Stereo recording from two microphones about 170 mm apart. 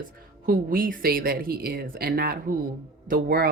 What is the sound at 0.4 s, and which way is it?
Speech, 55° right (ahead or behind).